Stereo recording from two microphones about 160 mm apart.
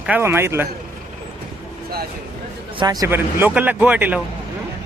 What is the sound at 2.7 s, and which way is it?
Speech, 25° right (ahead or behind).